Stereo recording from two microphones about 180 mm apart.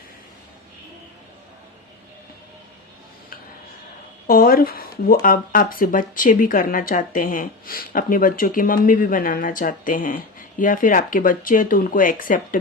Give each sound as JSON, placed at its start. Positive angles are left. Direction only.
{"t": 4.3, "sound": "speech", "side_deg": 55}